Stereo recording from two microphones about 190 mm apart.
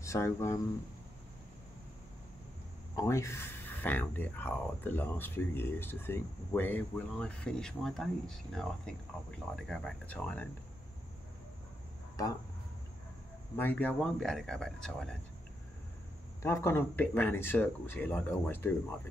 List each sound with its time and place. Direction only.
0.0 s speech: 15° left (ahead or behind)
3.0 s speech: 15° left (ahead or behind)
12.2 s speech: 20° left (ahead or behind)
13.6 s speech: 10° left (ahead or behind)
16.4 s speech: 15° left (ahead or behind)